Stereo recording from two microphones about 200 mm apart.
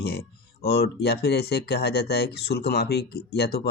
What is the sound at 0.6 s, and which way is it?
Speech, 55° left (ahead or behind).